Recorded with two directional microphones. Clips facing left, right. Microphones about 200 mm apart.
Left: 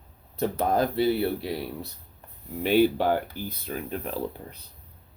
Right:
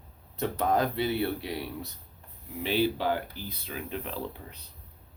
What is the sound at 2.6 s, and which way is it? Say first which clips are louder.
Speech: left 6 dB; 50° left (ahead or behind).